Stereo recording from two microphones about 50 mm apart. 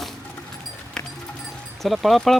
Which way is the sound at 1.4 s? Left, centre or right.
Centre.